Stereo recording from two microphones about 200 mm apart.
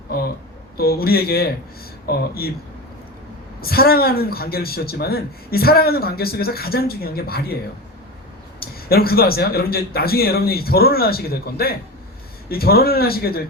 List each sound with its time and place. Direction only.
0.8 s a man's voice: 50° left (ahead or behind)
3.6 s a man's voice: 50° left (ahead or behind)
8.6 s a man's voice: 50° left (ahead or behind)